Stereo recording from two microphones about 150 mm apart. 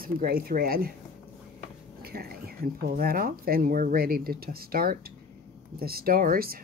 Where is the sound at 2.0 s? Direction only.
90° right.